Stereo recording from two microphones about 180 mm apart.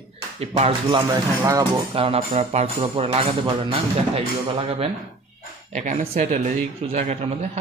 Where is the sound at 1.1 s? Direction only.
20° right (ahead or behind).